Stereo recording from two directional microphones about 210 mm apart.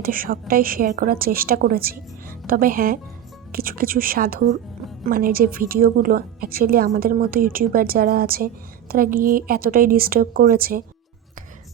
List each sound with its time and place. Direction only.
0.0 s a woman's voice: 40° right (ahead or behind)